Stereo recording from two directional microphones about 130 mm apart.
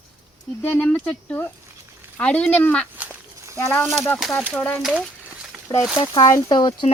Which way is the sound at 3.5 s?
20° left (ahead or behind).